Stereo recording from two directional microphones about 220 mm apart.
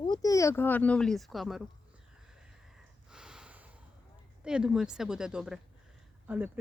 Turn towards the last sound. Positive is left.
turn(degrees=-5)  # may be behind; listen again after turning